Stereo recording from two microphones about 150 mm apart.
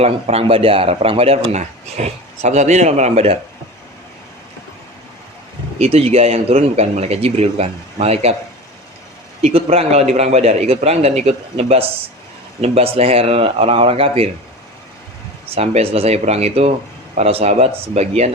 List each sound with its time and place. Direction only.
0.0 s a man's voice: 45° right (ahead or behind)
5.8 s a man's voice: 40° right (ahead or behind)
9.4 s a man's voice: 40° right (ahead or behind)
15.5 s a man's voice: 40° right (ahead or behind)